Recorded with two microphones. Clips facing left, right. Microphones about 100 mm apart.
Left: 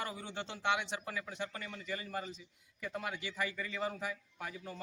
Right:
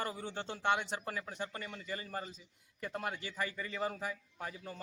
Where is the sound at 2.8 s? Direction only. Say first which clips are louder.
Right 1 dB; 45° right (ahead or behind); by 4.5 s 30° right (ahead or behind).